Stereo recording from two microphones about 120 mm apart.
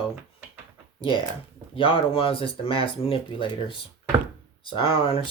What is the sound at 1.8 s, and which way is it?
Speech, 50° left (ahead or behind).